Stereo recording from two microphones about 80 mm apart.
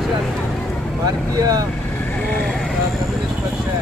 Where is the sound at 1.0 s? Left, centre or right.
Right.